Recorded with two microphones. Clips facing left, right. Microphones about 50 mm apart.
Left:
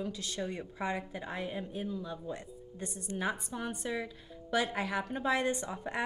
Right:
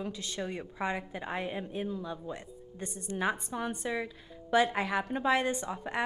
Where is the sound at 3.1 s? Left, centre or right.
Centre.